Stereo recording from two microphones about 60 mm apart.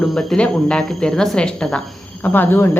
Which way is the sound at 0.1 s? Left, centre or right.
Centre.